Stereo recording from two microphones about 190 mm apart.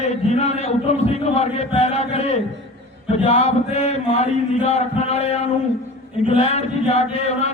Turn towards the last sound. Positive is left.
turn(degrees=35)  # may be behind; listen again after turning